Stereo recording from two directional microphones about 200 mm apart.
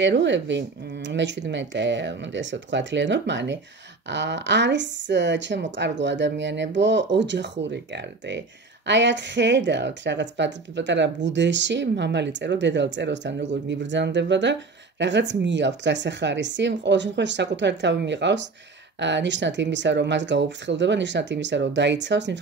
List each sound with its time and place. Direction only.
0.0 s a woman's voice: 60° right (ahead or behind)